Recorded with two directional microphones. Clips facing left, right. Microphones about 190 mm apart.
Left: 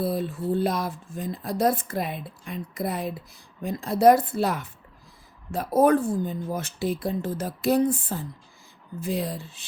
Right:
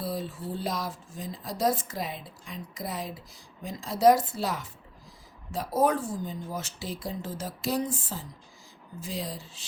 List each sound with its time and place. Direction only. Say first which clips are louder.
0.0 s speech: left 7 dB; 60° left (ahead or behind)